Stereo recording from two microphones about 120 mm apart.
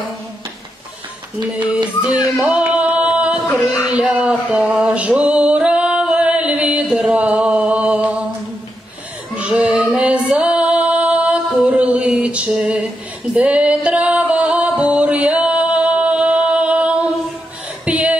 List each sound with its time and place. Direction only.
2.0 s speech: 35° left (ahead or behind)
2.3 s a sound: 10° right (ahead or behind)
3.9 s male singing: 5° right (ahead or behind)
9.6 s female singing: centre (ahead or behind)
13.3 s music: 10° right (ahead or behind)
17.8 s a sound: 10° right (ahead or behind)